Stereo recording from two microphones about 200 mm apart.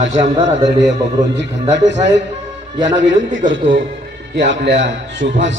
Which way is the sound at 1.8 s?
35° right (ahead or behind).